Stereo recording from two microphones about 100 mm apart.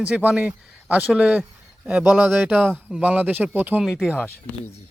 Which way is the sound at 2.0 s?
5° right (ahead or behind).